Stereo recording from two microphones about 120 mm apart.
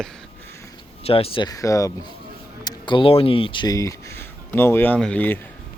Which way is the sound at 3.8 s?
25° left (ahead or behind).